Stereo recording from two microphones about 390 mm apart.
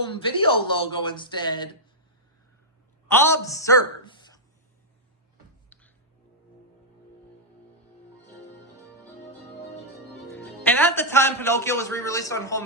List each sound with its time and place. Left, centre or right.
0.2 s speech: centre
3.1 s a woman's voice: centre
9.7 s music: left
10.3 s a man's voice: centre